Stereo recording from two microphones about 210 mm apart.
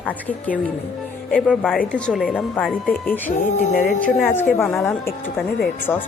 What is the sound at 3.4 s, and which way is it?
Music, 40° left (ahead or behind).